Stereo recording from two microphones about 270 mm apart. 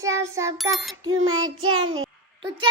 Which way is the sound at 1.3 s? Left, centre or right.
Right.